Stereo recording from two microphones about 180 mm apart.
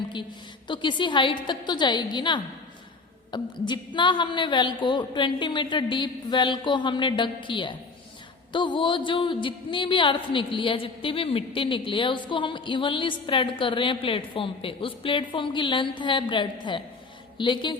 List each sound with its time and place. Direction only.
0.7 s a woman's voice: 25° left (ahead or behind)